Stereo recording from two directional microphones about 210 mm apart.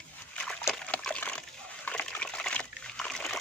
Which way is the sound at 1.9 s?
5° left (ahead or behind).